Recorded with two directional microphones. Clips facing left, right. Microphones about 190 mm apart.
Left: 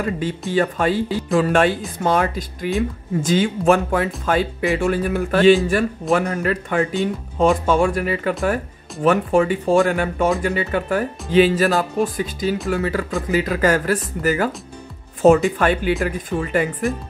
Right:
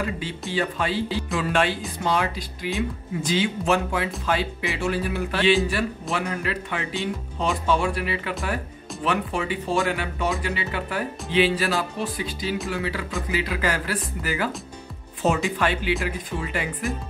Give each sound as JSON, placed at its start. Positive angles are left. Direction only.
{"t": 0.5, "sound": "speech", "side_deg": 50}
{"t": 15.5, "sound": "speech", "side_deg": 50}